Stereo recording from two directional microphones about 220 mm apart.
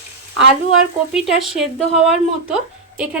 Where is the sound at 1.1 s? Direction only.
Centre (ahead or behind).